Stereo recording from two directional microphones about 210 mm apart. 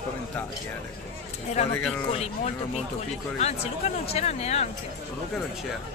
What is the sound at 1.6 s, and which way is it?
Speech, 30° left (ahead or behind).